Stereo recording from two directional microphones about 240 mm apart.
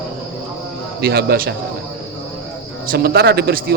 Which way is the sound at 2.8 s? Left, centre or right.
Right.